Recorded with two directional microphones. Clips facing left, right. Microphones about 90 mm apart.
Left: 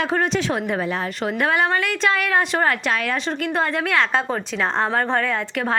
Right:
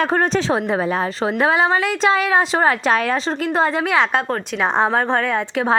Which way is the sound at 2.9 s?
35° right (ahead or behind).